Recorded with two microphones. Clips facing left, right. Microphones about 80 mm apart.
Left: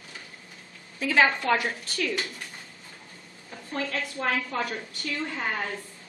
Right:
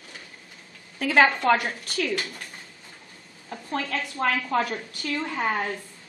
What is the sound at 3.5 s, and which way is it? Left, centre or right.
A woman's voice, right.